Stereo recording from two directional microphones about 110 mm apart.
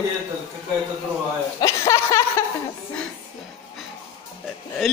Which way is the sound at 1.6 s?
25° left (ahead or behind).